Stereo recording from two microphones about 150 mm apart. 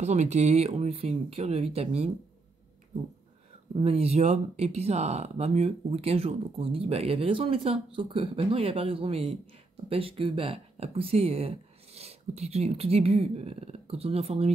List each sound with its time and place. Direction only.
0.0 s speech: 50° right (ahead or behind)
3.7 s speech: 40° right (ahead or behind)